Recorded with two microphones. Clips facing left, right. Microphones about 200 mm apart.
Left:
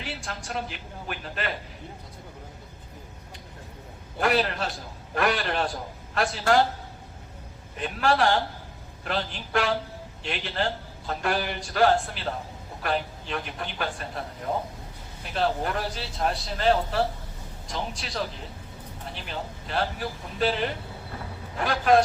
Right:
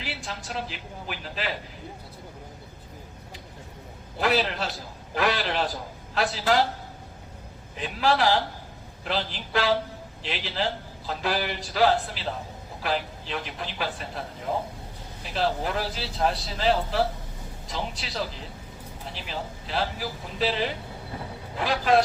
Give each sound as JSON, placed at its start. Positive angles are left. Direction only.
{"t": 0.0, "sound": "a man's voice", "side_deg": 0}
{"t": 4.2, "sound": "a man's voice", "side_deg": 0}
{"t": 7.8, "sound": "a man's voice", "side_deg": 0}
{"t": 10.2, "sound": "a man's voice", "side_deg": 0}